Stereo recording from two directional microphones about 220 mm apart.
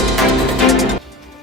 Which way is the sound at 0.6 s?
Centre (ahead or behind).